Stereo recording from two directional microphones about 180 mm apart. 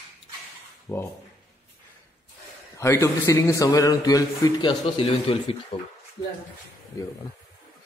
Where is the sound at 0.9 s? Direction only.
10° left (ahead or behind).